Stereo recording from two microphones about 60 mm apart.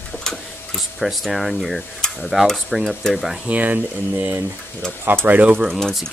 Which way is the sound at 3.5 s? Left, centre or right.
Right.